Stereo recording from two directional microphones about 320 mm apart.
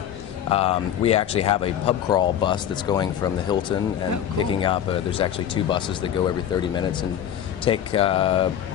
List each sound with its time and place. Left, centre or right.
0.5 s speech: centre